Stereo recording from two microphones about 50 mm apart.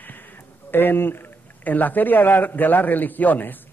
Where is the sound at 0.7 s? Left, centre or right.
Left.